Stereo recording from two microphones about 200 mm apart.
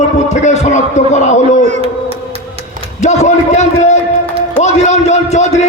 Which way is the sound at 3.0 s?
35° left (ahead or behind).